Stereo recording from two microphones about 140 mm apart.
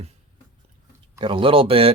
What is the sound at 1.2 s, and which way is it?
Speech, 40° right (ahead or behind).